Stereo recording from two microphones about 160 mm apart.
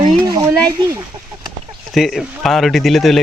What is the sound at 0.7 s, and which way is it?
Speech, 20° right (ahead or behind).